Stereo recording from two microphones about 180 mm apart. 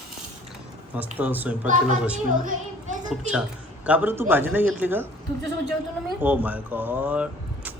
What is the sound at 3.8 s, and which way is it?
A man's voice, 10° right (ahead or behind).